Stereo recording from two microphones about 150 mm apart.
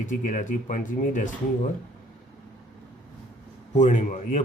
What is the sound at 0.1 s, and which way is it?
Speech, 60° left (ahead or behind).